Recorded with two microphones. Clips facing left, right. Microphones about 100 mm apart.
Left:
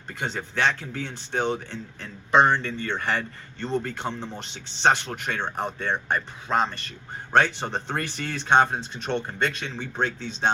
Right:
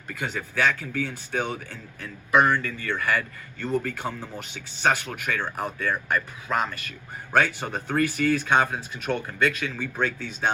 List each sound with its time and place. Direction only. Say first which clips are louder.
0.1 s a man's voice: even; 30° left (ahead or behind)